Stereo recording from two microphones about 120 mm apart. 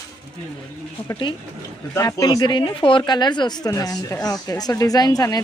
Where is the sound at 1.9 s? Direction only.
30° left (ahead or behind).